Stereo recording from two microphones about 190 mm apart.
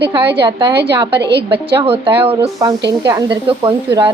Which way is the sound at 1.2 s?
60° right (ahead or behind).